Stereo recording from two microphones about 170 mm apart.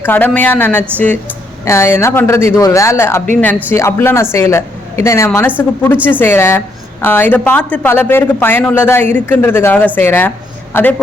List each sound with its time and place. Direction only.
0.0 s a woman's voice: 10° left (ahead or behind)